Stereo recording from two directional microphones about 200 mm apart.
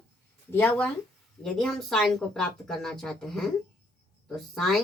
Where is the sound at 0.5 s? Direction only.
5° left (ahead or behind).